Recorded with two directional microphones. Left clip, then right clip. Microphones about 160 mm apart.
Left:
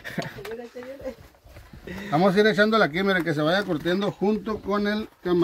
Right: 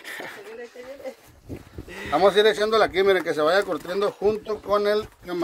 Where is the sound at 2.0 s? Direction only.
30° right (ahead or behind).